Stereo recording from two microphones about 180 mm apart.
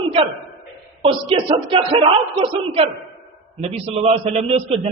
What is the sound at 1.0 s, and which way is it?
A man's voice, 30° right (ahead or behind).